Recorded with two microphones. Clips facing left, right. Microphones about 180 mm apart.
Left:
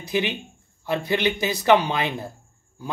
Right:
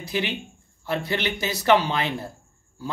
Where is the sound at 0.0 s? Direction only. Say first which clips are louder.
Left 3 dB; 20° left (ahead or behind).